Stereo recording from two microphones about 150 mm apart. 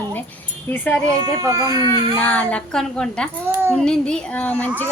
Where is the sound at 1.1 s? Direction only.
20° right (ahead or behind).